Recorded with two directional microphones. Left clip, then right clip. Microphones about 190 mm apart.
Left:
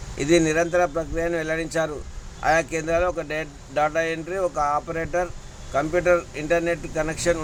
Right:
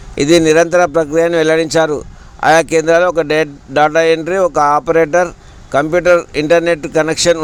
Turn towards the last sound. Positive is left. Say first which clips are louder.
# right 12 dB
turn(degrees=-45)  # may be behind; listen again after turning